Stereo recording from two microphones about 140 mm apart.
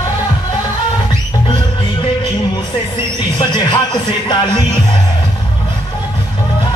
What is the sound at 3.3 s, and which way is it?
Music, 30° left (ahead or behind).